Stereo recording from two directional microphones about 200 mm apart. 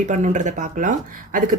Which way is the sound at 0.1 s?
35° right (ahead or behind).